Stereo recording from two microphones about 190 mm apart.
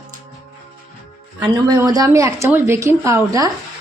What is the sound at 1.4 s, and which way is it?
A woman's voice, 20° right (ahead or behind).